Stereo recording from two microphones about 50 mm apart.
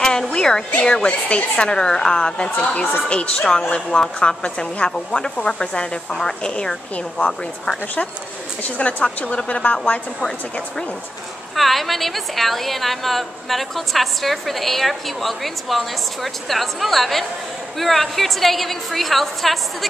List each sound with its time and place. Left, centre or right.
0.3 s music: centre
0.8 s a woman's voice: centre
8.6 s a woman's voice: left
11.5 s a woman's voice: centre